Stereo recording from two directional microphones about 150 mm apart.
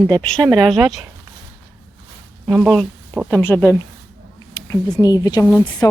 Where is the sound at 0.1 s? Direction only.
5° left (ahead or behind).